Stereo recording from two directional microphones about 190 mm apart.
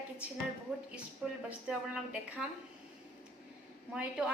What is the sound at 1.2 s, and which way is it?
A woman's voice, 5° right (ahead or behind).